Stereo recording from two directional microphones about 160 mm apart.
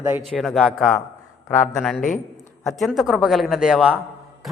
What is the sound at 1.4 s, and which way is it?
A man's voice, 10° left (ahead or behind).